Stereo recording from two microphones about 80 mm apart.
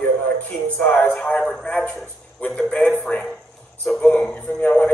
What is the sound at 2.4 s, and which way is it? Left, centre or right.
A man's voice, centre.